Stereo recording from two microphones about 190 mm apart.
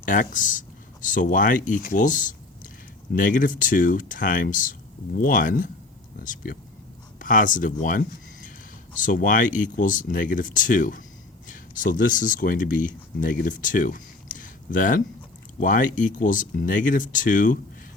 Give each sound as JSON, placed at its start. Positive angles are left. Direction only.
{"t": 0.0, "sound": "speech", "side_deg": 45}